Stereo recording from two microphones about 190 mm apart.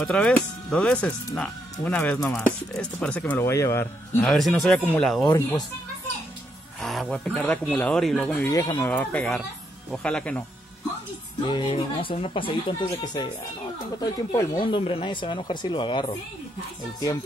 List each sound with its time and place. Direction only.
0.0 s speech: 5° left (ahead or behind)
6.8 s speech: centre (ahead or behind)
8.5 s speech: 15° left (ahead or behind)
11.4 s speech: 25° left (ahead or behind)
14.3 s speech: 20° left (ahead or behind)